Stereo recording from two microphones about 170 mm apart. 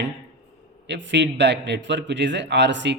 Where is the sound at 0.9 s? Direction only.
90° right.